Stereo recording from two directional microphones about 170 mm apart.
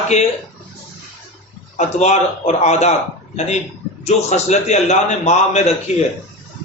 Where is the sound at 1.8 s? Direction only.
40° left (ahead or behind).